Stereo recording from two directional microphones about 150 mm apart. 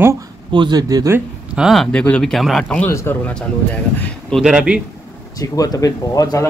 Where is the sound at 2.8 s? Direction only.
15° left (ahead or behind).